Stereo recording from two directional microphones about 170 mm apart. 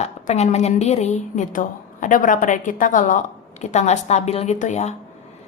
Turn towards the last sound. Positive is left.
turn(degrees=40)  # may be behind; listen again after turning